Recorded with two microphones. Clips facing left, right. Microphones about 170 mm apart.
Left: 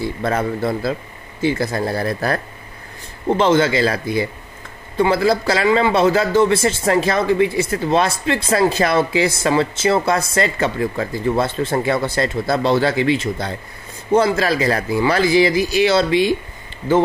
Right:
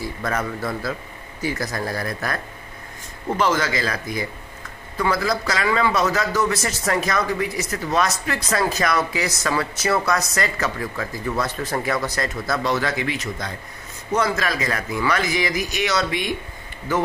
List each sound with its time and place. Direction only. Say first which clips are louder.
0.0 s a man's voice: left 5 dB; 30° left (ahead or behind)